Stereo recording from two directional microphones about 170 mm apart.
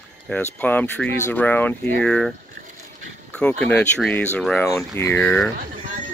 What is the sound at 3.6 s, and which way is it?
Speech, 5° left (ahead or behind).